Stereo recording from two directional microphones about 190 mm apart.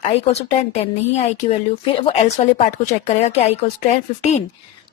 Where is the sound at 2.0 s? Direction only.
30° left (ahead or behind).